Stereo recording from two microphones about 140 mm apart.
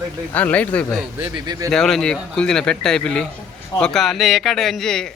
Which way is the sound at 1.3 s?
30° right (ahead or behind).